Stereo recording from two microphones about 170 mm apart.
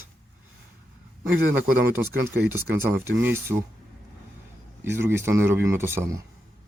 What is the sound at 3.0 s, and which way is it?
Speech, 15° right (ahead or behind).